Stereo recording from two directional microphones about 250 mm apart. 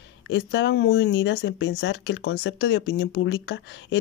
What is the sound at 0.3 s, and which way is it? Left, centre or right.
Speech, left.